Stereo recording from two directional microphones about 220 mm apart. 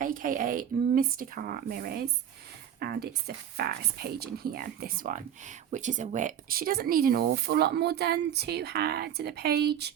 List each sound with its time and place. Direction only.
0.0 s speech: 40° right (ahead or behind)